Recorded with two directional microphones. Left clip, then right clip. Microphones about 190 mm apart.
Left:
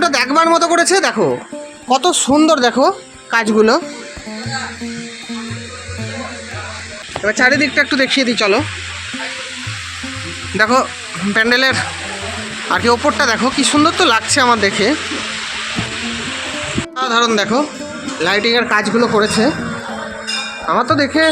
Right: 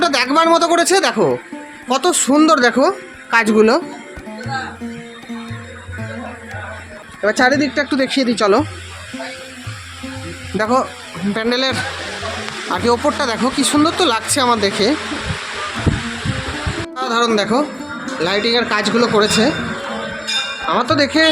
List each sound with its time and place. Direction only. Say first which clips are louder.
0.0 s speech: left 1 dB; centre (ahead or behind)
7.3 s speech: left 1 dB; 20° right (ahead or behind)
8.4 s speech: right 2 dB; 25° right (ahead or behind)
10.6 s speech: left 3 dB; 10° right (ahead or behind)
17.0 s speech: left 2 dB; 5° right (ahead or behind)
20.7 s speech: left 2 dB; 5° left (ahead or behind)